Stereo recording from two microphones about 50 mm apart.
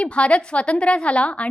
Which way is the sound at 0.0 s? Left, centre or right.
Left.